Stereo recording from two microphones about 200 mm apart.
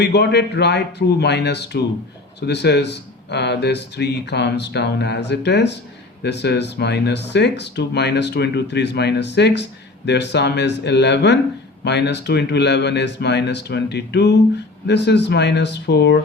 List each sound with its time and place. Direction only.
0.0 s speech: 55° left (ahead or behind)